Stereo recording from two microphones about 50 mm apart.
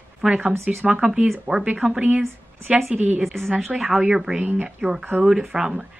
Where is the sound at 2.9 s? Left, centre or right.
Right.